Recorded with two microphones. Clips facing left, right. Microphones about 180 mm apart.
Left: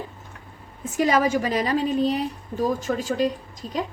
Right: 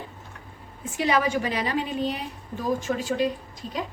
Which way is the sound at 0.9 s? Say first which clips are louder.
Left 3 dB; 40° left (ahead or behind).